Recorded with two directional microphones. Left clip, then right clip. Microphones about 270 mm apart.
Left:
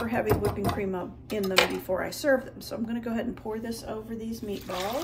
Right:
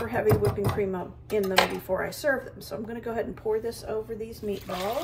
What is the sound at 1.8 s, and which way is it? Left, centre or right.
Speech, centre.